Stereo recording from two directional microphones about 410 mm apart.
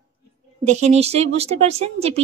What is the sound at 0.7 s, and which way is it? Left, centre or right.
A woman's voice, centre.